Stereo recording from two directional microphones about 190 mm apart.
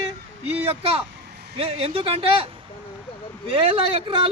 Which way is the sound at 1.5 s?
30° right (ahead or behind).